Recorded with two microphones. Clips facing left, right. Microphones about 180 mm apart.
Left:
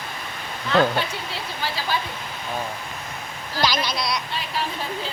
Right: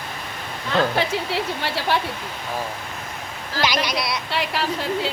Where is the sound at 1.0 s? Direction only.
85° right.